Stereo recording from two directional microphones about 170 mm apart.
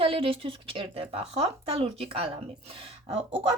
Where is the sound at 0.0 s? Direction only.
35° right (ahead or behind).